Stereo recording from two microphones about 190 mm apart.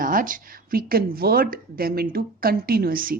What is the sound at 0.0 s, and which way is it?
A woman's voice, 45° right (ahead or behind).